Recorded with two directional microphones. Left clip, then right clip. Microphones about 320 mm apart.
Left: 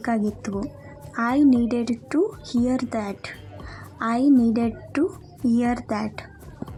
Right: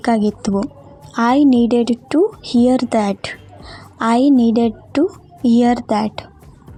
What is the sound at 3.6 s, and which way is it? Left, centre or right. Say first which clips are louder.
Music: right 8 dB; centre.